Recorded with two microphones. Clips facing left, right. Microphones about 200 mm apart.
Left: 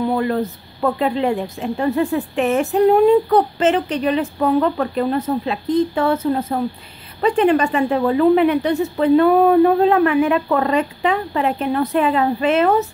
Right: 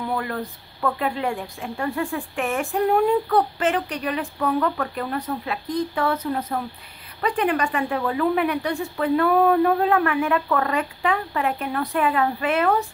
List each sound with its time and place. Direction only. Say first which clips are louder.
0.0 s speech: left 8 dB; 25° left (ahead or behind)